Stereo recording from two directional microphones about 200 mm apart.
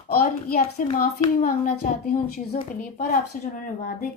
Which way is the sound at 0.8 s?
40° left (ahead or behind).